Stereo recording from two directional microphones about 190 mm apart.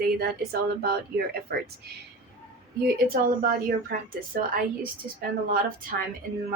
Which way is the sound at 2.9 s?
50° right (ahead or behind).